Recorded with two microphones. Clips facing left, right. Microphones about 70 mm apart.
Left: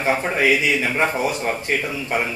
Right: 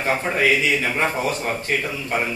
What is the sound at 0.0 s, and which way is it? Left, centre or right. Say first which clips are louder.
A man's voice: left 1 dB; centre.